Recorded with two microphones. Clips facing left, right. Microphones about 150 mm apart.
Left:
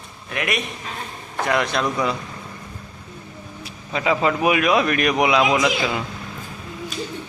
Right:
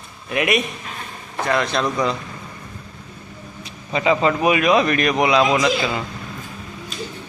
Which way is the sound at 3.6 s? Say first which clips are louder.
Right 3 dB; centre (ahead or behind).